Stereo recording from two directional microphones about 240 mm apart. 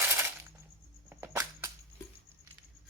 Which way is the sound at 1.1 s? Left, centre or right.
Centre.